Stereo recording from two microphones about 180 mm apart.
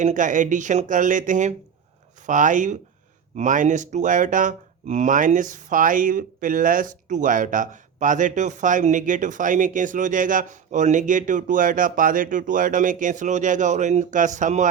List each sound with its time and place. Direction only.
0.0 s speech: 45° right (ahead or behind)